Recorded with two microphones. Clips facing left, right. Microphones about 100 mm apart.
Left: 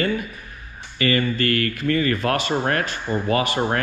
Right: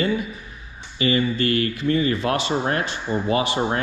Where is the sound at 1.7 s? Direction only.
55° left (ahead or behind).